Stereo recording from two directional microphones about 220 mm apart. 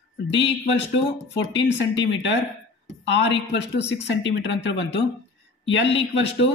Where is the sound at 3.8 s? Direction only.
60° left (ahead or behind).